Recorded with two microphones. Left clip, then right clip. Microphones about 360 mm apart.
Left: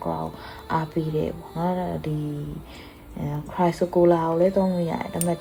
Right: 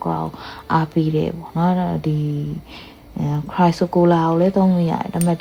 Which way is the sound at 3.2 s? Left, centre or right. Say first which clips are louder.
Right 6 dB; right.